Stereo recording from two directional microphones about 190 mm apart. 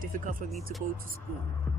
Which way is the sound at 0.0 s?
45° right (ahead or behind).